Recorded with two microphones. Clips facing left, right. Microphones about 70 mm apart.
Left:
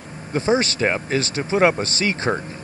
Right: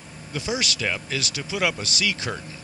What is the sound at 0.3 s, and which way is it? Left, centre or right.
Speech, left.